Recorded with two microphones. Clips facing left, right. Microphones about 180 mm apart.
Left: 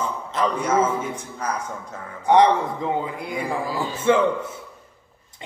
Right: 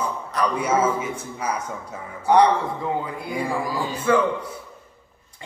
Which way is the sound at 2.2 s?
20° left (ahead or behind).